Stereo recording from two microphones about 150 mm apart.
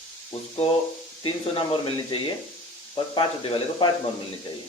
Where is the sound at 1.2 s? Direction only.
35° left (ahead or behind).